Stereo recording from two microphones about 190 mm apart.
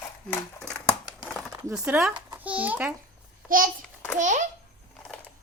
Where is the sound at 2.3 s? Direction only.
10° right (ahead or behind).